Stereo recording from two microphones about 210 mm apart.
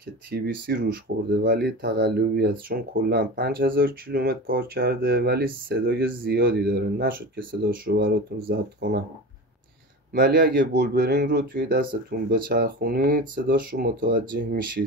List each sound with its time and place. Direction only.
0.3 s speech: 45° right (ahead or behind)
10.1 s speech: 45° right (ahead or behind)